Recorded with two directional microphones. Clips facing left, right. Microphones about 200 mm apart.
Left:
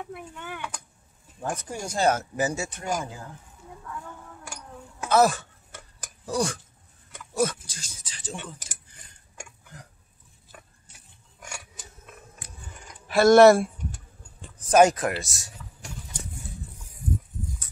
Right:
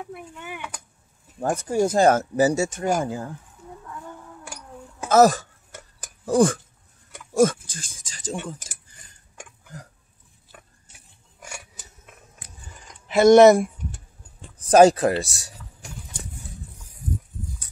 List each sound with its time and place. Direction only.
0.0 s speech: 5° right (ahead or behind)
1.4 s speech: 45° right (ahead or behind)
5.0 s speech: 40° right (ahead or behind)
6.2 s speech: 50° right (ahead or behind)
13.0 s speech: 20° right (ahead or behind)
14.7 s speech: 30° right (ahead or behind)